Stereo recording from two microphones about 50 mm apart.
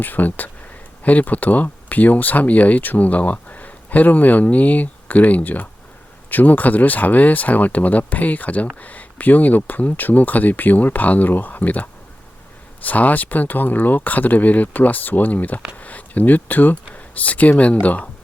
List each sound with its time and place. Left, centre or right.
0.0 s speech: left